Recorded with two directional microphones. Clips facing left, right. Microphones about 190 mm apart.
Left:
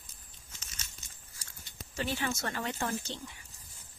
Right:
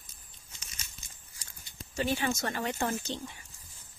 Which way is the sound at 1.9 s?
15° right (ahead or behind).